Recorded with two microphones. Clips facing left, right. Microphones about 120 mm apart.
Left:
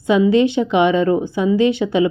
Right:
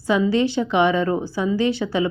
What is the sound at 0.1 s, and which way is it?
Speech, 20° left (ahead or behind).